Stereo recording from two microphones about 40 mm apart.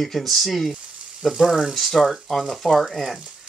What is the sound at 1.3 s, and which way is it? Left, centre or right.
Speech, centre.